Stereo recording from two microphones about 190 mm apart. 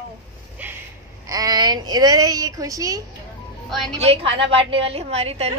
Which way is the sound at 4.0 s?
30° right (ahead or behind).